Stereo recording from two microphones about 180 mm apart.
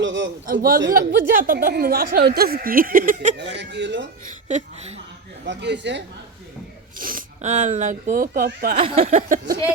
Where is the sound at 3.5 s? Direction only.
75° right (ahead or behind).